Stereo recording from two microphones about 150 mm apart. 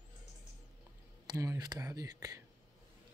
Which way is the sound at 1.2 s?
25° right (ahead or behind).